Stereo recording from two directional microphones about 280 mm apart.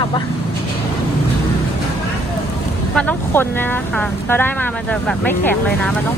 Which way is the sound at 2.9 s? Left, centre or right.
Centre.